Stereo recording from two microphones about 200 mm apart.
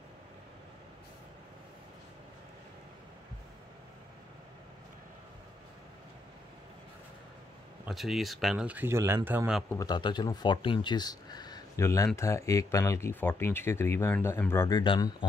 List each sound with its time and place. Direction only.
7.8 s speech: centre (ahead or behind)
9.7 s speech: 20° left (ahead or behind)